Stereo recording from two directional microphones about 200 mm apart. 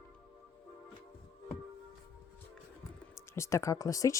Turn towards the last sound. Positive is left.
turn(degrees=15)  # may be behind; listen again after turning